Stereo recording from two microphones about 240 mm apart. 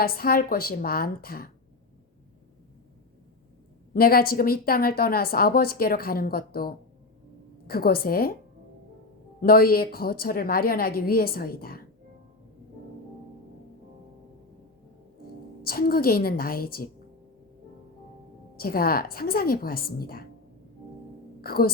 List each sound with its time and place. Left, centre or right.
0.0 s a woman's voice: left
3.9 s a woman's voice: left
9.4 s a woman's voice: left
15.6 s a woman's voice: left
18.5 s a woman's voice: left
21.4 s speech: left